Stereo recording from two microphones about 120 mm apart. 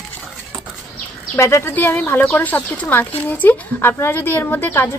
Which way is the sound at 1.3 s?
20° left (ahead or behind).